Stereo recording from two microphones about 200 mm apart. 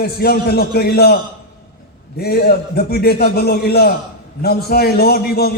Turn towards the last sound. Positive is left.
turn(degrees=50)  # may be behind; listen again after turning